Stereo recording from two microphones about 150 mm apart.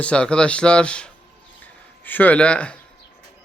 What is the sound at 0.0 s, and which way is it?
Speech, 5° left (ahead or behind).